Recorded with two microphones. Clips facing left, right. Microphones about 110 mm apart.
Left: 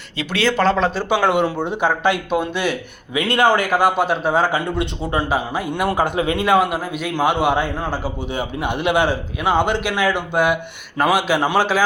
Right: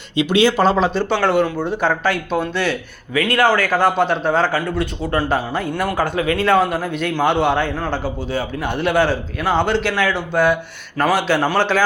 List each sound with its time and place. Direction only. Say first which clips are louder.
0.2 s speech: right 4 dB; 15° right (ahead or behind)
1.1 s a man's voice: left 1 dB; 15° left (ahead or behind)